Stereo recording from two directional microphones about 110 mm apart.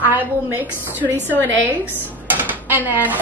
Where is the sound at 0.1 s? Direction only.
15° right (ahead or behind).